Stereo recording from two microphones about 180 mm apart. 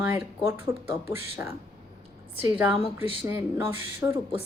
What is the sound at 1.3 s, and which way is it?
Speech, 10° right (ahead or behind).